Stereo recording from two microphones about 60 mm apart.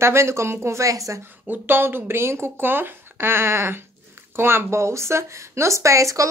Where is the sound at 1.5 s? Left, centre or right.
Right.